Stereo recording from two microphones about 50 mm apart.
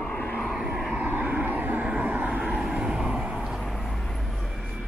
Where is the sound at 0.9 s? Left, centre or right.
Right.